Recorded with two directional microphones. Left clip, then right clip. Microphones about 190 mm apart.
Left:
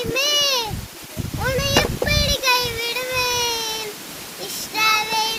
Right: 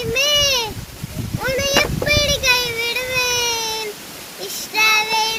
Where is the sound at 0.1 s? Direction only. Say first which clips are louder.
Right 3 dB; 20° left (ahead or behind).